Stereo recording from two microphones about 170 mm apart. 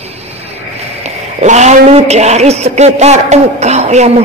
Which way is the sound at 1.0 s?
45° right (ahead or behind).